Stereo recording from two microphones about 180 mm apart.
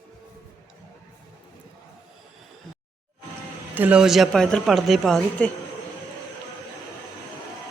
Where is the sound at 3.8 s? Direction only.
5° right (ahead or behind).